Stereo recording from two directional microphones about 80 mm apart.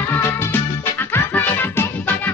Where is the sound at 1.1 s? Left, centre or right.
Left.